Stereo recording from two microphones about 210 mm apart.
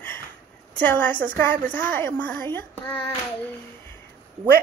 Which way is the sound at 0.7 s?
10° left (ahead or behind).